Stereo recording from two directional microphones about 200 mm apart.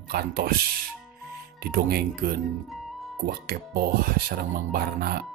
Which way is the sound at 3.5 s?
50° right (ahead or behind).